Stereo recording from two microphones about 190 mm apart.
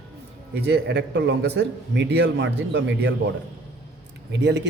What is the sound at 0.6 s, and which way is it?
A man's voice, 60° right (ahead or behind).